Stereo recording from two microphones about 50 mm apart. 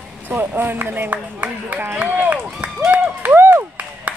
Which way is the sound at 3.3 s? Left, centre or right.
Right.